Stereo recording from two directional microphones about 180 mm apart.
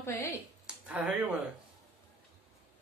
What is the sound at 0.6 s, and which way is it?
Speech, 5° right (ahead or behind).